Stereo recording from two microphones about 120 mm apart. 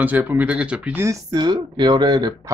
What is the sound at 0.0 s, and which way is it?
Speech, 15° right (ahead or behind).